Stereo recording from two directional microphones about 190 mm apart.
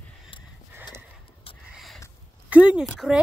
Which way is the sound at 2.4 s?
5° right (ahead or behind).